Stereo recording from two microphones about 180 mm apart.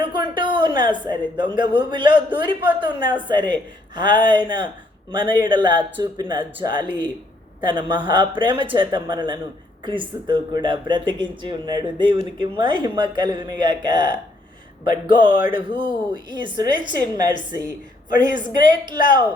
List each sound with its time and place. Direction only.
0.0 s speech: 25° right (ahead or behind)